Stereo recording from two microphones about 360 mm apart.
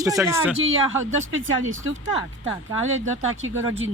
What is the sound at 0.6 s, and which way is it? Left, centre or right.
Speech, right.